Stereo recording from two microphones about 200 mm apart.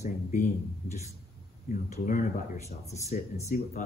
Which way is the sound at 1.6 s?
40° left (ahead or behind).